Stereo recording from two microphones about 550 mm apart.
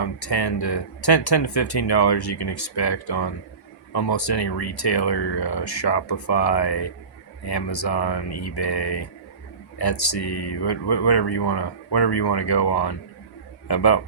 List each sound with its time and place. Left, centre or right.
0.0 s speech: left